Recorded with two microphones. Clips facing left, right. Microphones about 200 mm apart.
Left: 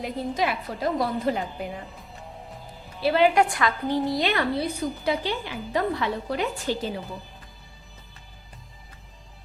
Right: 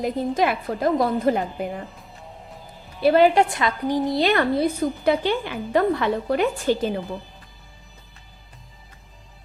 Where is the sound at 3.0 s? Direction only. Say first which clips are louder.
Right 5 dB; 45° right (ahead or behind).